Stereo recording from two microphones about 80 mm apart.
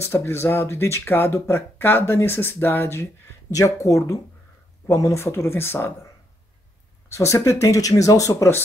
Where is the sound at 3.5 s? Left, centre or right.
Left.